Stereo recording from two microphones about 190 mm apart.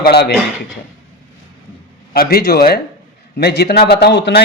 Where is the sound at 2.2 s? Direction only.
55° left (ahead or behind).